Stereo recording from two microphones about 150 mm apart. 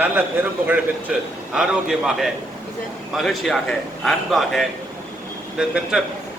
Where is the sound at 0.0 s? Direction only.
10° right (ahead or behind).